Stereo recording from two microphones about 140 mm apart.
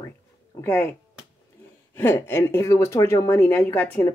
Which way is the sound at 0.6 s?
15° left (ahead or behind).